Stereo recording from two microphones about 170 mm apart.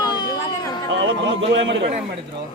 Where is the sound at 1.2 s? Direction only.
90° right.